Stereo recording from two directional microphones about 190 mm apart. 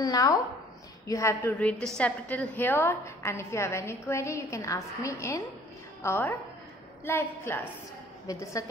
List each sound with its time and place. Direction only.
0.0 s a woman's voice: 20° left (ahead or behind)